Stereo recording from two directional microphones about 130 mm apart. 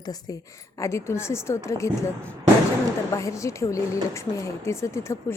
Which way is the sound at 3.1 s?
25° left (ahead or behind).